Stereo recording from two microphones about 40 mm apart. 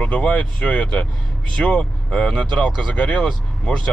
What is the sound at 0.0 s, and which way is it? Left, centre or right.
Speech, left.